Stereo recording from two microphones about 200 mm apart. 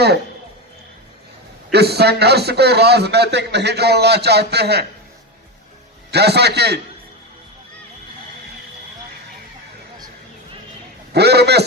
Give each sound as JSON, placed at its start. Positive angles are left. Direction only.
{"t": 1.7, "sound": "speech", "side_deg": -55}
{"t": 6.1, "sound": "speech", "side_deg": -55}
{"t": 11.1, "sound": "speech", "side_deg": -55}